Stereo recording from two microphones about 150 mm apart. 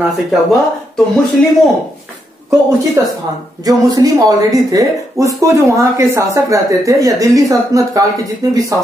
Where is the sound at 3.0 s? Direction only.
20° right (ahead or behind).